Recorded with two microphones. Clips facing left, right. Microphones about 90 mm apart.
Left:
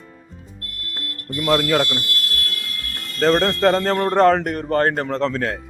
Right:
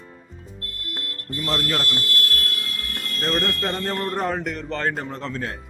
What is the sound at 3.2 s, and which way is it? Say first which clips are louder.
Speech: left 9 dB; 90° left.